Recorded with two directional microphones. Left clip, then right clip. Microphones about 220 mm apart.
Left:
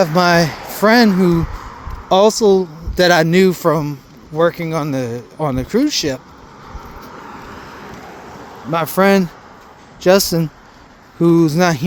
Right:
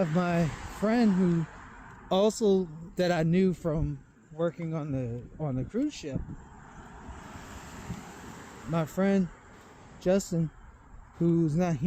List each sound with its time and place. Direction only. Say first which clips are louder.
0.0 s speech: left 17 dB; 20° left (ahead or behind)
2.0 s speech: left 14 dB; 15° left (ahead or behind); by 6.1 s 35° left (ahead or behind)
7.2 s vehicle: left 13 dB; 40° right (ahead or behind)
8.7 s speech: left 16 dB; 30° left (ahead or behind)